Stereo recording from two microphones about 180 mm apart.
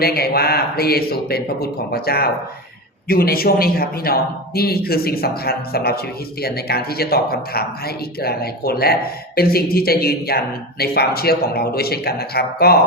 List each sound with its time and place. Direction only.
0.0 s speech: 60° left (ahead or behind)